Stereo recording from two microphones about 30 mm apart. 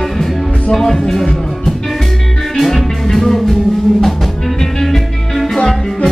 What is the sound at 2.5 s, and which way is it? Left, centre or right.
Music, centre.